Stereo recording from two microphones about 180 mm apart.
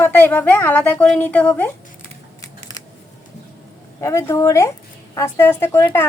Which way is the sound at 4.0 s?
15° left (ahead or behind).